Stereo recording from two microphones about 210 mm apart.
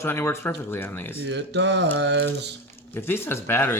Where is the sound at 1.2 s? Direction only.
55° right (ahead or behind).